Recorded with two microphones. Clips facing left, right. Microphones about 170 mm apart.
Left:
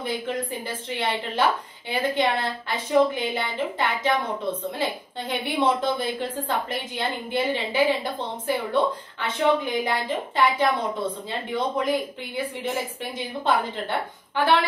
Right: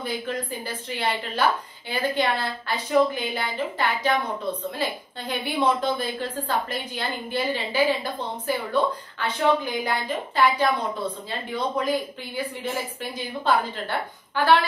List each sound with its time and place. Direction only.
0.0 s a woman's voice: 25° left (ahead or behind)
13.4 s a woman's voice: 20° left (ahead or behind)